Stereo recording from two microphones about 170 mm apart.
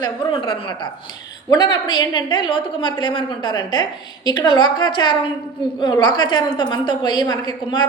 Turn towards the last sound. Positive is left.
turn(degrees=25)  # may be behind; listen again after turning